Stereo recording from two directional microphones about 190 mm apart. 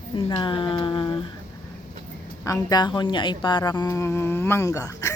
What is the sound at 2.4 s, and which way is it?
A woman's voice, 20° left (ahead or behind).